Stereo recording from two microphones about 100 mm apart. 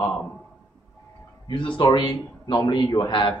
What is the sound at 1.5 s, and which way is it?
Speech, 55° left (ahead or behind).